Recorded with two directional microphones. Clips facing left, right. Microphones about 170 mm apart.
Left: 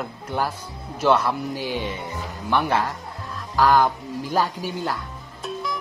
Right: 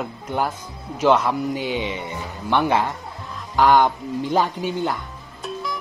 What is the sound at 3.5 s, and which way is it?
Speech, 25° right (ahead or behind).